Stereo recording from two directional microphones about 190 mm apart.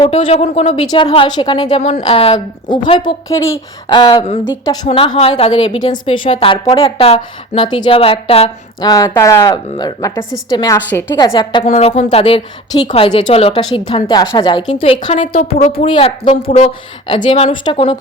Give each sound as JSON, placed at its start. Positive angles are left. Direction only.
{"t": 0.0, "sound": "a woman's voice", "side_deg": 35}
{"t": 1.7, "sound": "a woman's voice", "side_deg": 35}
{"t": 8.9, "sound": "a woman's voice", "side_deg": 15}
{"t": 11.7, "sound": "a woman's voice", "side_deg": 35}